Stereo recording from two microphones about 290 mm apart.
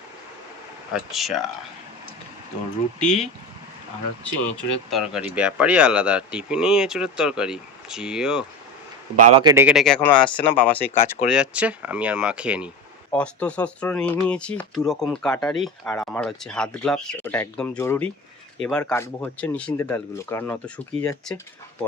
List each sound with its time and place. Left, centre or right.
0.9 s speech: centre
3.0 s speech: centre
9.1 s speech: centre
10.1 s speech: centre
11.3 s speech: centre